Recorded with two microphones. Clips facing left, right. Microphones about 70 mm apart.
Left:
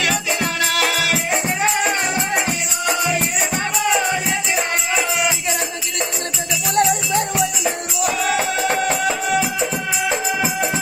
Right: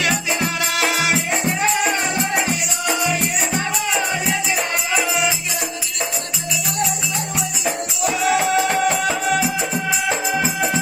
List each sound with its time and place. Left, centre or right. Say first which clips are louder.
0.0 s music: even; centre
1.9 s music: even; left
6.7 s music: left 9 dB; left
7.6 s music: left 1 dB; centre